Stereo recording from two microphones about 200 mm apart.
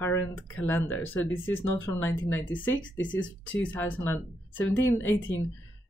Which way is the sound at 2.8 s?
75° left (ahead or behind).